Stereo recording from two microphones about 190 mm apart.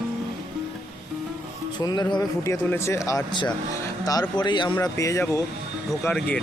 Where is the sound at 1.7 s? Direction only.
20° left (ahead or behind).